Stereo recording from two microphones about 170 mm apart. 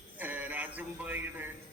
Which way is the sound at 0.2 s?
10° right (ahead or behind).